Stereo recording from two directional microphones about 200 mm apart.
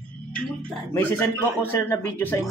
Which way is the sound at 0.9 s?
10° left (ahead or behind).